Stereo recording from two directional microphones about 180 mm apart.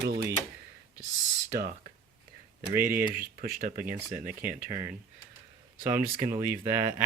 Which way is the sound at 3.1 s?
55° right (ahead or behind).